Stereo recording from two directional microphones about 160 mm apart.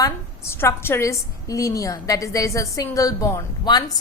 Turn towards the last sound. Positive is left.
turn(degrees=25)  # may be behind; listen again after turning